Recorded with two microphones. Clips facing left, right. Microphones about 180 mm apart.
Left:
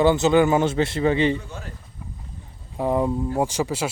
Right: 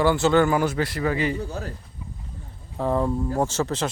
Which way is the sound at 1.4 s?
35° right (ahead or behind).